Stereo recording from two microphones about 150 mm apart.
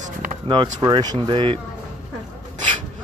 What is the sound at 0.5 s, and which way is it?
Speech, 30° right (ahead or behind).